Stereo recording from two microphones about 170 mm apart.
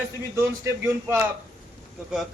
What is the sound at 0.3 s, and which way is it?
Speech, 15° right (ahead or behind).